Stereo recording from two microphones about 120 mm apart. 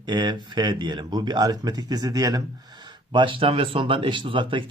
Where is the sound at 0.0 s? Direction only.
40° right (ahead or behind).